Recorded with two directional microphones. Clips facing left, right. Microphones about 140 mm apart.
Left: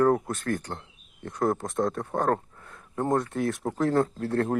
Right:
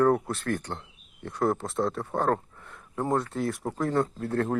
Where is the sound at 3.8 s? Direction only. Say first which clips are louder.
Left 3 dB; 75° left (ahead or behind).